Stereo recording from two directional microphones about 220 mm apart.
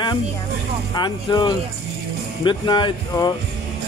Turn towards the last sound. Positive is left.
turn(degrees=20)  # may be behind; listen again after turning